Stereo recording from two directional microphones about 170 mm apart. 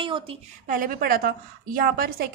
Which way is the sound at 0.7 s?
55° right (ahead or behind).